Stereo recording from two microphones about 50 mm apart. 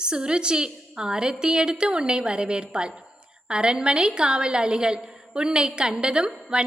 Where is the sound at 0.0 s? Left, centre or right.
Centre.